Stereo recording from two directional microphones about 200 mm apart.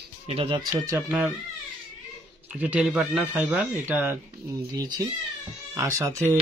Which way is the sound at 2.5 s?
5° right (ahead or behind).